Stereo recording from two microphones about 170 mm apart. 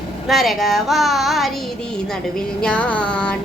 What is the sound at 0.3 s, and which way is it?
Speech, centre (ahead or behind).